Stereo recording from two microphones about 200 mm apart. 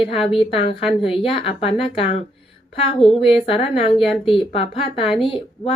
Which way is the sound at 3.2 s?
25° left (ahead or behind).